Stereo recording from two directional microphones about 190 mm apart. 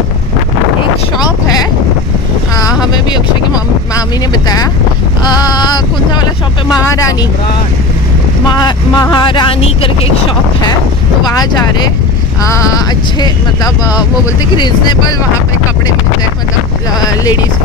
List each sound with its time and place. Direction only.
2.9 s vehicle: 20° left (ahead or behind)
5.4 s a sound: 20° left (ahead or behind)
6.9 s vehicle: 15° left (ahead or behind)
8.5 s speech: 20° left (ahead or behind)
12.4 s vehicle: 15° left (ahead or behind)
14.6 s speech: 25° left (ahead or behind)
17.1 s speech: 20° left (ahead or behind)